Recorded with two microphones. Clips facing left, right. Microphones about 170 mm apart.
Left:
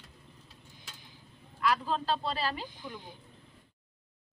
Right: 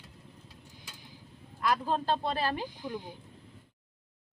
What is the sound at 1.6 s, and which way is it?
Speech, 45° right (ahead or behind).